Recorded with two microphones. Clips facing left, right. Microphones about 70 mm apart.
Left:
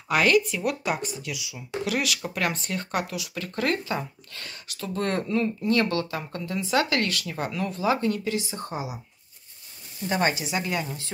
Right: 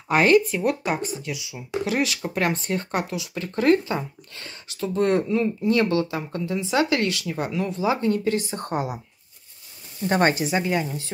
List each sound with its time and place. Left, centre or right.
0.1 s speech: right
8.2 s a woman's voice: right
10.0 s a woman's voice: right
10.5 s speech: centre